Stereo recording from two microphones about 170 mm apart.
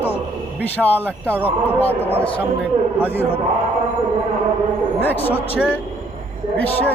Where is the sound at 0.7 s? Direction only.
10° left (ahead or behind).